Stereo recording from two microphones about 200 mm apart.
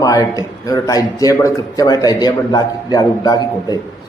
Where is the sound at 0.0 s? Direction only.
15° left (ahead or behind).